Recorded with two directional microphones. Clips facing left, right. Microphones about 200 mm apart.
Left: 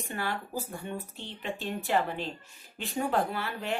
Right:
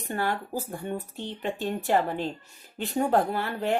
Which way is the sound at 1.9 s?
45° right (ahead or behind).